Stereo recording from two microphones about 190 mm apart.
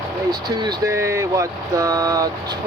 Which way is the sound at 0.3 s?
20° right (ahead or behind).